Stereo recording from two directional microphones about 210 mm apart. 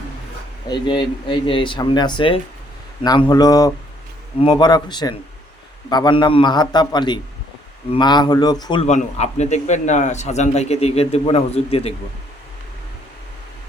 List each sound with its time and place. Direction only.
0.7 s speech: 20° left (ahead or behind)
8.9 s a man's voice: 35° left (ahead or behind)